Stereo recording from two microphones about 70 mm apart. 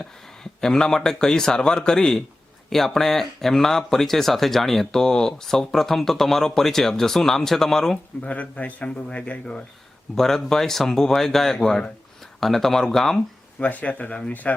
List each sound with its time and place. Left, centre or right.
0.6 s a man's voice: centre
8.2 s a man's voice: centre
13.6 s speech: left